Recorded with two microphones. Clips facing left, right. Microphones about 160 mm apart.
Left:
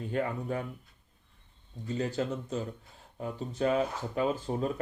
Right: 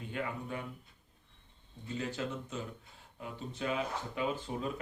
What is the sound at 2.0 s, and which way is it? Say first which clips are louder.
Speech: left 6 dB; 40° left (ahead or behind).